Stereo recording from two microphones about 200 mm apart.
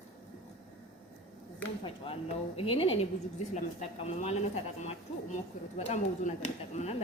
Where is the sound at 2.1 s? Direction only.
25° left (ahead or behind).